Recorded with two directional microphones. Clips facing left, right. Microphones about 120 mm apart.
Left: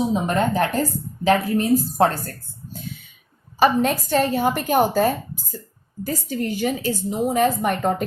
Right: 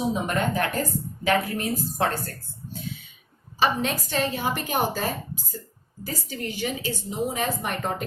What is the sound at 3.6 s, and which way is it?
A woman's voice, 45° left (ahead or behind).